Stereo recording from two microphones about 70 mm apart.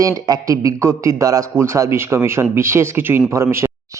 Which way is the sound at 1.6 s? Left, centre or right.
Right.